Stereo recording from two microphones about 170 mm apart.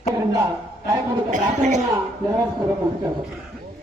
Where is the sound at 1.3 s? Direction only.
45° right (ahead or behind).